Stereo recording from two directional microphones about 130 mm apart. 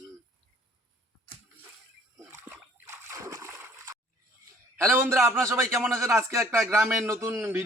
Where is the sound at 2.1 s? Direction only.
20° right (ahead or behind).